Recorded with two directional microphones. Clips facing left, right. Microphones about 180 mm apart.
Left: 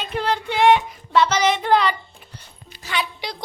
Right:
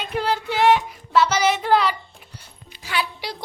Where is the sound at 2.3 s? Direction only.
10° right (ahead or behind).